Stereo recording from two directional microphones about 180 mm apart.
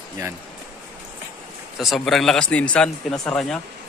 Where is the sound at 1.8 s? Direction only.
Centre (ahead or behind).